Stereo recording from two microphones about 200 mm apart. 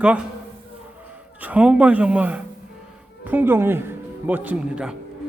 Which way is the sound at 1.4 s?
5° right (ahead or behind).